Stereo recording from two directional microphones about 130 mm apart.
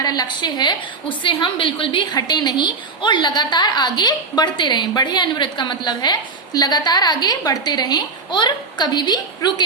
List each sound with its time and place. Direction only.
0.0 s a woman's voice: 30° left (ahead or behind)